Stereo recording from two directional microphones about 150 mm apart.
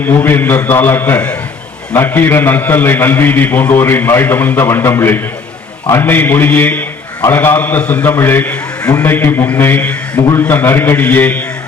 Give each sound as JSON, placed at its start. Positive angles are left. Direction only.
{"t": 0.0, "sound": "a man's voice", "side_deg": 10}
{"t": 8.9, "sound": "a man's voice", "side_deg": 25}